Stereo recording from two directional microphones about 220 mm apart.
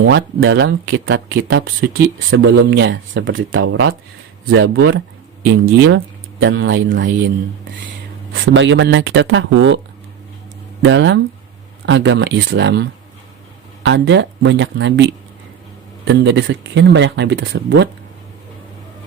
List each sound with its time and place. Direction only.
0.0 s speech: 50° right (ahead or behind); by 3.9 s 70° right (ahead or behind)
4.5 s speech: 55° right (ahead or behind)
10.8 s speech: 55° right (ahead or behind)